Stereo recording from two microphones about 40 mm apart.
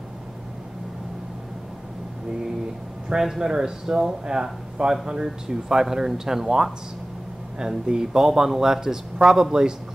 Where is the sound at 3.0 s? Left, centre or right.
Centre.